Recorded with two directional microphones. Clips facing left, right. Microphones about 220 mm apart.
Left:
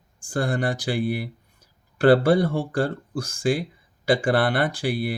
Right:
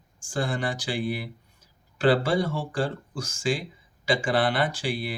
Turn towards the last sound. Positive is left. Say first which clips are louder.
# left 4 dB
turn(degrees=55)  # may be behind; listen again after turning